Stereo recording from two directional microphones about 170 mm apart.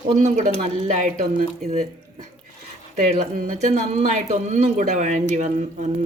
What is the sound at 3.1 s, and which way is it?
Speech, 50° right (ahead or behind).